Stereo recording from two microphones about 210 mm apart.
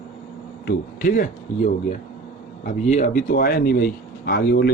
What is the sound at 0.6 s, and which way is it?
Speech, 40° left (ahead or behind).